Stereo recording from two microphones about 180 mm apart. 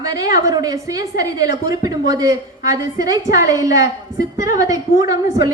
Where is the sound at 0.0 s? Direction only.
20° right (ahead or behind).